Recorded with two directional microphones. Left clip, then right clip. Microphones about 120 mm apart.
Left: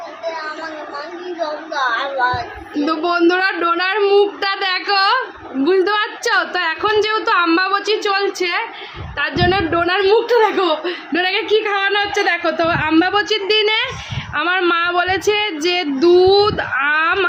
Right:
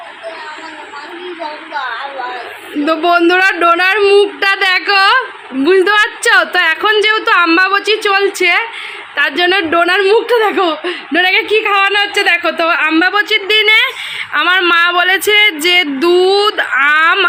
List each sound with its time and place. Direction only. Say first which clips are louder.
2.8 s a woman's voice: right 5 dB; 25° right (ahead or behind)
9.7 s a woman's voice: right 5 dB; 50° right (ahead or behind); by 10.9 s 90° right
11.1 s a woman's voice: right 6 dB; 40° right (ahead or behind); by 17.2 s 5° right (ahead or behind)